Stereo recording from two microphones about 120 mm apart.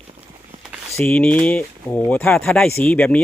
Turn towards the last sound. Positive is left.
turn(degrees=10)  # may be behind; listen again after turning